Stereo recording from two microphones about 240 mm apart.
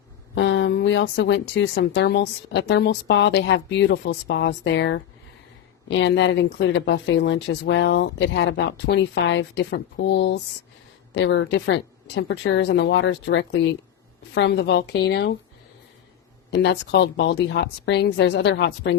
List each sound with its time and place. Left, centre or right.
0.3 s speech: left
16.5 s speech: left